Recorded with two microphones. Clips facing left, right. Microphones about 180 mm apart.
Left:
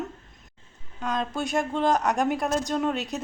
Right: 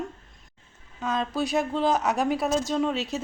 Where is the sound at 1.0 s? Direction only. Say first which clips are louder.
Right 1 dB; centre (ahead or behind).